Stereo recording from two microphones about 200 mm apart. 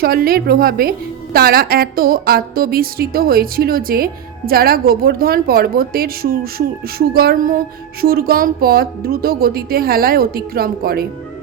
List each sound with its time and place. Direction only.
0.0 s a woman's voice: 50° right (ahead or behind)